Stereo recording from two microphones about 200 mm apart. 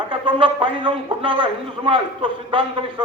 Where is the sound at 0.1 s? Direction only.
25° right (ahead or behind).